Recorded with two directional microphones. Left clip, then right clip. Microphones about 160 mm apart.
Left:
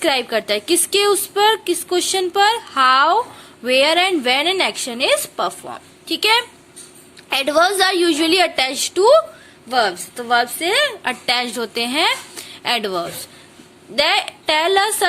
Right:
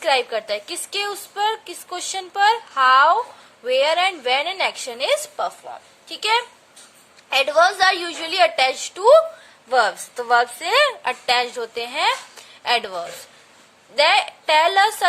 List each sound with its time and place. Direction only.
0.0 s a woman's voice: 5° left (ahead or behind)
5.4 s a woman's voice: 20° left (ahead or behind); by 9.2 s 5° left (ahead or behind)
9.6 s speech: 15° right (ahead or behind)
11.0 s a woman's voice: centre (ahead or behind)